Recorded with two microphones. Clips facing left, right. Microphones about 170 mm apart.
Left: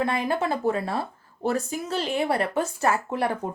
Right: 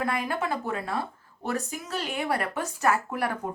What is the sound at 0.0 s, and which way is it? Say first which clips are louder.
Speech: left 4 dB; 25° left (ahead or behind).